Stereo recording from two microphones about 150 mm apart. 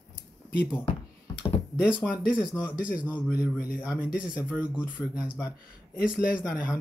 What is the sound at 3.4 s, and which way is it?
Speech, 90° left.